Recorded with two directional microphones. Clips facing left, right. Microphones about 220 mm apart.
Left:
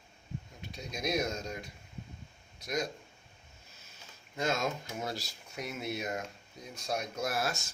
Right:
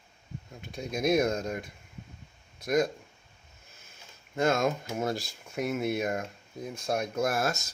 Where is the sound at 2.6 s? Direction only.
55° right (ahead or behind).